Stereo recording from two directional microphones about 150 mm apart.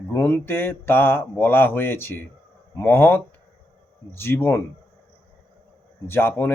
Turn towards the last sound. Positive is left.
turn(degrees=15)  # may be behind; listen again after turning